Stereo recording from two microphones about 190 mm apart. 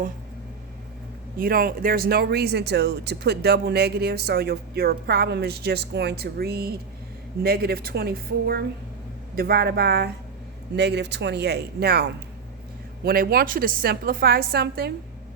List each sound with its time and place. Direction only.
1.4 s a woman's voice: 50° right (ahead or behind)